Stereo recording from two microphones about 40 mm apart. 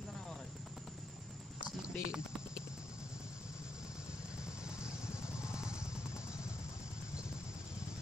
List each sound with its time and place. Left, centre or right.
1.8 s clip-clop: centre
4.6 s vehicle: centre